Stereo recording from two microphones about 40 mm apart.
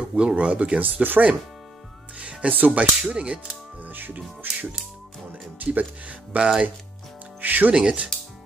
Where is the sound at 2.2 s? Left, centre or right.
Right.